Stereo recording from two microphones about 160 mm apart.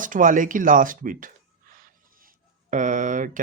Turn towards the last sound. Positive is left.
turn(degrees=-55)  # may be behind; listen again after turning